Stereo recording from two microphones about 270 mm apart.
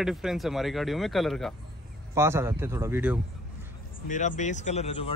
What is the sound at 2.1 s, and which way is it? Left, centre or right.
Speech, centre.